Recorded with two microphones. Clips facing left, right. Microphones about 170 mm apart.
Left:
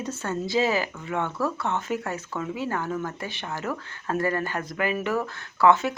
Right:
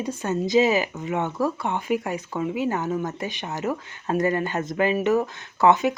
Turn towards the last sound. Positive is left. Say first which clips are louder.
# right 1 dB
turn(degrees=-20)  # may be behind; listen again after turning